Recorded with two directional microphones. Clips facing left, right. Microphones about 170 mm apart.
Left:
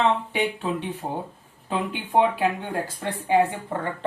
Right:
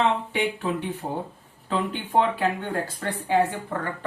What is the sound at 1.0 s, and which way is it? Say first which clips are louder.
Speech: even; 15° left (ahead or behind).